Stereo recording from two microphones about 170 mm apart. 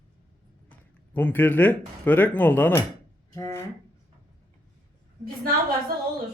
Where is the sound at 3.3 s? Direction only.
15° left (ahead or behind).